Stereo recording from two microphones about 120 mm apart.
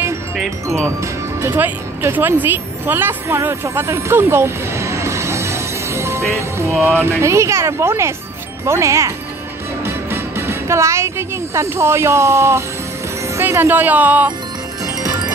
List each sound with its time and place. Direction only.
0.8 s speech: 20° right (ahead or behind)